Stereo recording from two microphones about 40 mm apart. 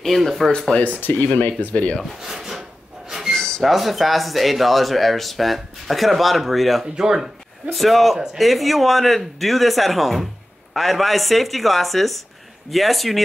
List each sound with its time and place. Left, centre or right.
0.0 s speech: centre
0.7 s speech: left
1.4 s speech: left
2.0 s speech: centre
3.1 s a sound: centre
3.3 s a sound: centre
3.6 s speech: centre
7.0 s speech: centre
7.7 s speech: centre